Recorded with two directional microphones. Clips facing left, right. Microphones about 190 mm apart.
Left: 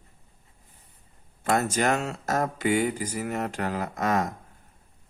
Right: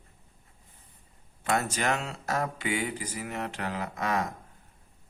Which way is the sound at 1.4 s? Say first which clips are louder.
Left 4 dB; 45° left (ahead or behind).